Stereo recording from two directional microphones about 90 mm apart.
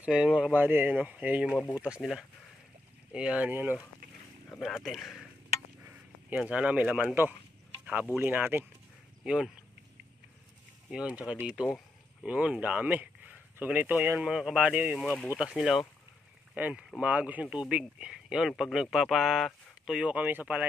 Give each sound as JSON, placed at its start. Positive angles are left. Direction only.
{"t": 0.0, "sound": "speech", "side_deg": -10}
{"t": 0.6, "sound": "speech", "side_deg": -25}
{"t": 3.1, "sound": "speech", "side_deg": -10}
{"t": 4.6, "sound": "speech", "side_deg": 0}
{"t": 5.8, "sound": "a sound", "side_deg": -20}
{"t": 8.2, "sound": "speech", "side_deg": -25}
{"t": 9.2, "sound": "speech", "side_deg": -10}
{"t": 10.9, "sound": "speech", "side_deg": -10}
{"t": 14.2, "sound": "speech", "side_deg": -5}
{"t": 16.5, "sound": "speech", "side_deg": -20}